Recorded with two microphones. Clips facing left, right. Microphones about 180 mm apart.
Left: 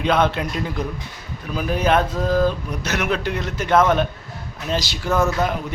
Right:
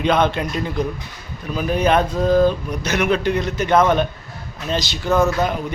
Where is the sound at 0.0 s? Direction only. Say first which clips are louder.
Right 1 dB; 5° left (ahead or behind).